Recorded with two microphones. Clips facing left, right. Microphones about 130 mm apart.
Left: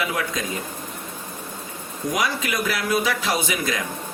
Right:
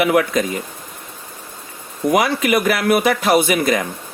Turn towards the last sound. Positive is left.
turn(degrees=-60)  # may be behind; listen again after turning